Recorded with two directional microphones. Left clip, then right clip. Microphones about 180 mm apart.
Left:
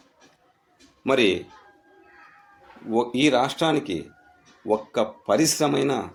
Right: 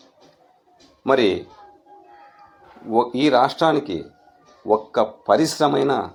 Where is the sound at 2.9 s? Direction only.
20° left (ahead or behind).